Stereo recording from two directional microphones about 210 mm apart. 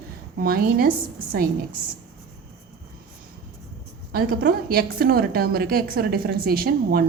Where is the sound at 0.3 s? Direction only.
45° right (ahead or behind).